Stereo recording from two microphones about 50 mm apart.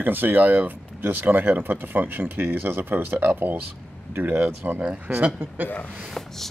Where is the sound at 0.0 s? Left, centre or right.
Right.